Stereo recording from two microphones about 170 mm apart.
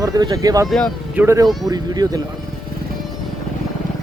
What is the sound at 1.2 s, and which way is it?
Speech, 15° right (ahead or behind).